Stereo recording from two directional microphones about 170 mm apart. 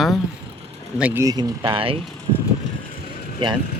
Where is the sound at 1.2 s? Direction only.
25° right (ahead or behind).